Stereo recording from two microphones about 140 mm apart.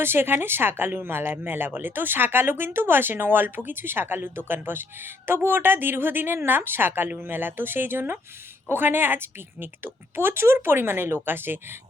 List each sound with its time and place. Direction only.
0.0 s speech: 15° right (ahead or behind)